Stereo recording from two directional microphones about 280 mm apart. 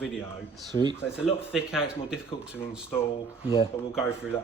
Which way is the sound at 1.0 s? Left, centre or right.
Centre.